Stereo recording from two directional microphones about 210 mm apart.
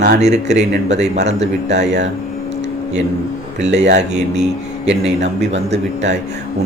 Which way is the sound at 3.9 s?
35° right (ahead or behind).